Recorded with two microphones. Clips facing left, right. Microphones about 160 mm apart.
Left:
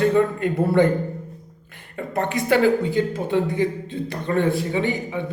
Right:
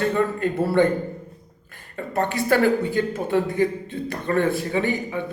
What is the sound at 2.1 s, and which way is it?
Speech, 20° left (ahead or behind).